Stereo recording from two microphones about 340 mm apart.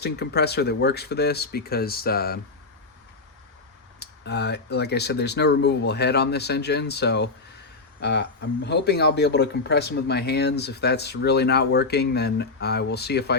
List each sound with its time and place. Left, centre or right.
0.0 s a man's voice: left
4.0 s a man's voice: left